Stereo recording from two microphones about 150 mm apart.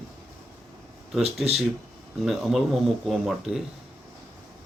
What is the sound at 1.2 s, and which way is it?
Speech, 45° right (ahead or behind).